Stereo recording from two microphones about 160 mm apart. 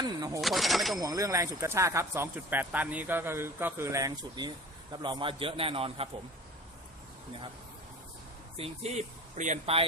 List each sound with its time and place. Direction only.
0.4 s speech: centre (ahead or behind)
0.9 s speech: 20° right (ahead or behind)
8.5 s speech: 40° right (ahead or behind)